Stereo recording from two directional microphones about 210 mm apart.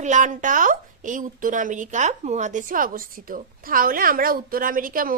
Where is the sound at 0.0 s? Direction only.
35° right (ahead or behind).